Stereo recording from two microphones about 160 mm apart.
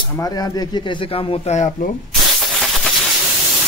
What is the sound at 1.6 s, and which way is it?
Speech, 55° left (ahead or behind).